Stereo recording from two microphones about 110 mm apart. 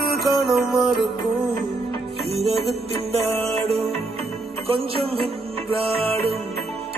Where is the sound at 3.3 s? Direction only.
65° right (ahead or behind).